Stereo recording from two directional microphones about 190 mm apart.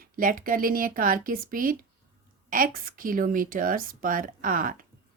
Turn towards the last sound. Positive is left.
turn(degrees=-45)  # may be behind; listen again after turning